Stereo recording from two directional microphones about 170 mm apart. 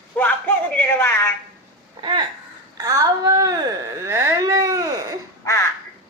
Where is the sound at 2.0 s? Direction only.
25° right (ahead or behind).